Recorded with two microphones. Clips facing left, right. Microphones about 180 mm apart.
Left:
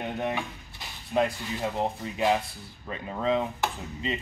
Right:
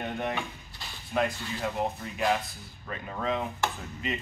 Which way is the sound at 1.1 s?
25° left (ahead or behind).